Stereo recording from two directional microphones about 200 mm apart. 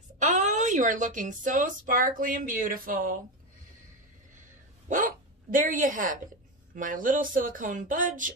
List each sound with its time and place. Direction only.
0.2 s speech: 35° right (ahead or behind)
4.4 s bow-wow: 40° right (ahead or behind)
6.7 s speech: 40° right (ahead or behind)